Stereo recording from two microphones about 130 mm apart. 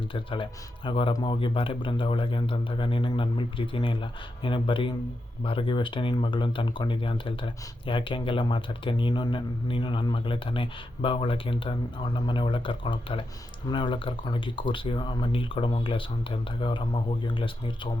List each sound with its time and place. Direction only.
0.1 s speech: 40° left (ahead or behind)